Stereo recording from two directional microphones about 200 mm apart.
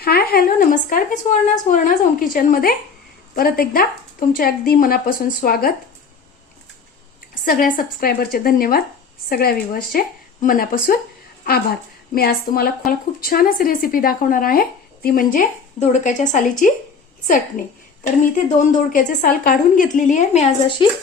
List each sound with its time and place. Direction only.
0.0 s a woman's voice: 50° left (ahead or behind)
7.4 s speech: 45° left (ahead or behind)
18.0 s a woman's voice: 40° left (ahead or behind)